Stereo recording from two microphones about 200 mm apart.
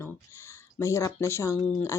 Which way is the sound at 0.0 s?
15° left (ahead or behind).